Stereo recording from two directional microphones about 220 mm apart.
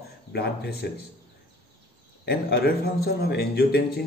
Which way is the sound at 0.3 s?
50° left (ahead or behind).